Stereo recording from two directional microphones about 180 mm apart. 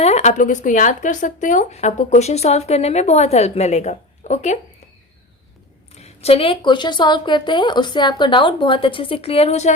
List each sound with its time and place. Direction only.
0.0 s speech: 40° left (ahead or behind)
5.9 s a woman's voice: 35° left (ahead or behind)